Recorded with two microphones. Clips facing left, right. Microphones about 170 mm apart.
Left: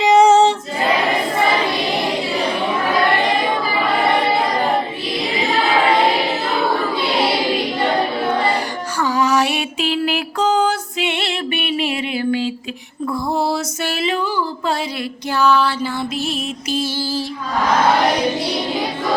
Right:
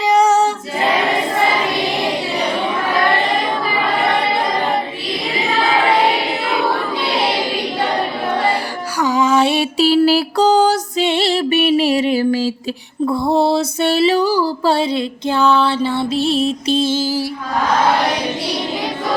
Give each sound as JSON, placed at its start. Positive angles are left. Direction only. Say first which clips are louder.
{"t": 0.0, "sound": "female singing", "louder": "left 2 dB", "side_deg": 25}
{"t": 9.0, "sound": "music", "louder": "right 3 dB", "side_deg": -20}
{"t": 13.1, "sound": "a sound", "louder": "right 5 dB", "side_deg": -25}